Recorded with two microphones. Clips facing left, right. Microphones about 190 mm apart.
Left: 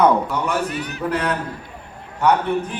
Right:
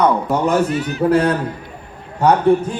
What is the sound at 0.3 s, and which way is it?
A man's voice, 45° right (ahead or behind).